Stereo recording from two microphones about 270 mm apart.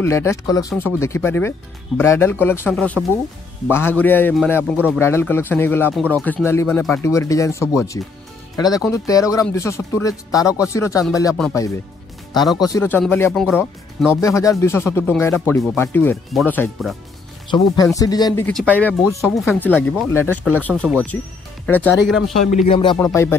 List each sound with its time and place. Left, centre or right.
0.0 s speech: centre
12.6 s speech: centre
22.5 s speech: left